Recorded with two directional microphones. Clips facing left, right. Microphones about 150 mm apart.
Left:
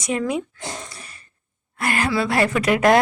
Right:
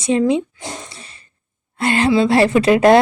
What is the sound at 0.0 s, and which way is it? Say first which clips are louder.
Speech: right 7 dB; 25° right (ahead or behind).